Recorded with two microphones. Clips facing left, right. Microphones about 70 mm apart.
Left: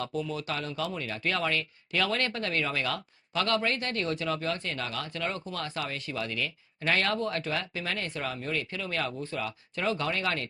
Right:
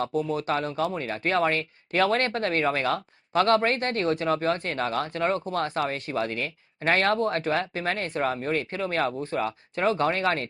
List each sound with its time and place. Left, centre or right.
0.0 s speech: right